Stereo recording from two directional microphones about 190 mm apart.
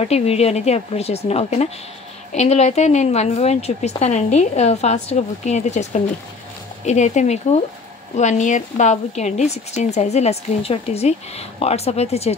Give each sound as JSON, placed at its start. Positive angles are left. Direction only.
{"t": 0.0, "sound": "a woman's voice", "side_deg": 35}